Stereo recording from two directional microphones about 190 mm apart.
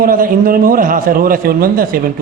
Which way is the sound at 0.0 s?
45° right (ahead or behind).